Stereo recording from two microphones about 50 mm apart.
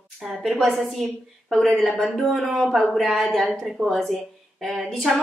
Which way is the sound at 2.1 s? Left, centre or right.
Centre.